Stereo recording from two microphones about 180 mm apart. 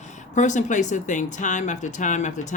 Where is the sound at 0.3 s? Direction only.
45° left (ahead or behind).